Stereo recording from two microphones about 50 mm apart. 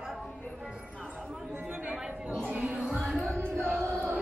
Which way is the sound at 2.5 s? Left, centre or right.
Right.